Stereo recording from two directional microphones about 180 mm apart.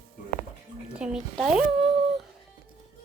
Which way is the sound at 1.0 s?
Centre (ahead or behind).